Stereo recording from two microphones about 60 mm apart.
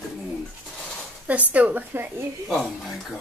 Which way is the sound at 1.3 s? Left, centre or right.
Right.